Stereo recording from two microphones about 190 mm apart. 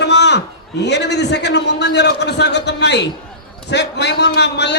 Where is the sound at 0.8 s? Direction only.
65° left (ahead or behind).